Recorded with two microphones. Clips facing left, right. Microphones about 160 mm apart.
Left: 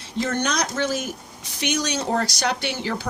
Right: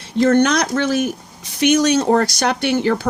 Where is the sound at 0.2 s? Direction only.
60° right (ahead or behind).